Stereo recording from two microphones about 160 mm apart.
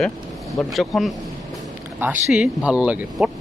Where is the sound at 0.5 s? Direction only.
Centre (ahead or behind).